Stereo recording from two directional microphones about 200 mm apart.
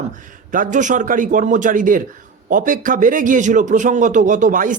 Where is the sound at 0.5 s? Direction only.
40° right (ahead or behind).